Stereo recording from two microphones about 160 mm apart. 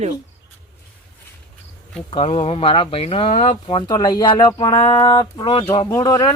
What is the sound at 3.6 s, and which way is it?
Speech, 30° left (ahead or behind).